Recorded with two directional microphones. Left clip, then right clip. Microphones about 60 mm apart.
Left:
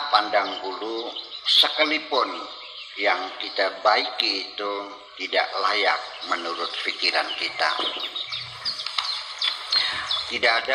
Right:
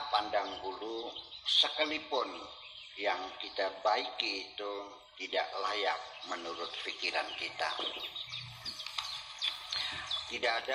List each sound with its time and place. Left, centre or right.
0.0 s a man's voice: left